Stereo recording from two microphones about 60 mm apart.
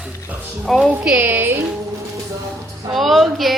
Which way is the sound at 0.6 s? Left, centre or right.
Centre.